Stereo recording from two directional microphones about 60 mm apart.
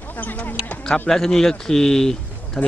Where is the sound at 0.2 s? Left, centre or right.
Left.